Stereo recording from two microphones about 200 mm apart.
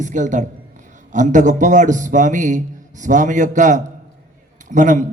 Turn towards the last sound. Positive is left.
turn(degrees=-40)  # may be behind; listen again after turning